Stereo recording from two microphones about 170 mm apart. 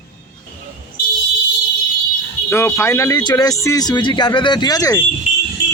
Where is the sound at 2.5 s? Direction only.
15° left (ahead or behind).